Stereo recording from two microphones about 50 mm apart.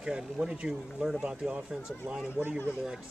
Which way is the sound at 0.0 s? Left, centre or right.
Centre.